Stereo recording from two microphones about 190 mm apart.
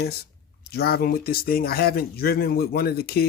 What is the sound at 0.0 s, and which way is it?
Speech, 55° left (ahead or behind).